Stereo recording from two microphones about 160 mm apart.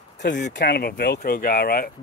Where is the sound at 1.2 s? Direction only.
65° left (ahead or behind).